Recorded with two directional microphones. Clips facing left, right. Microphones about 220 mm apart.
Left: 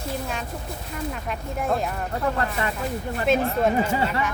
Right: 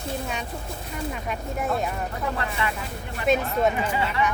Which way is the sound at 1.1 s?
Centre (ahead or behind).